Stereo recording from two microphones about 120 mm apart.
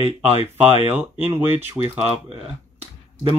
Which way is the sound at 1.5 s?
55° right (ahead or behind).